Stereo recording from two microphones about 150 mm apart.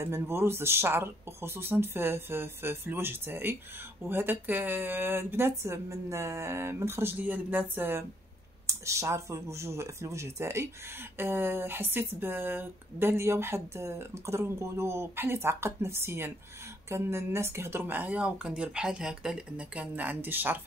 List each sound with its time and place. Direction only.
0.0 s speech: 15° right (ahead or behind)